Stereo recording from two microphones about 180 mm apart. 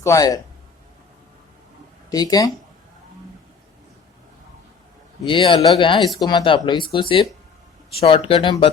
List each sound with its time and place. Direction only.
0.0 s a man's voice: 20° left (ahead or behind)
2.0 s speech: 20° left (ahead or behind)
5.2 s speech: 25° left (ahead or behind)